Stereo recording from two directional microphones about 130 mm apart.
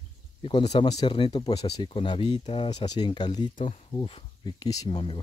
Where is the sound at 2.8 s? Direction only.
30° left (ahead or behind).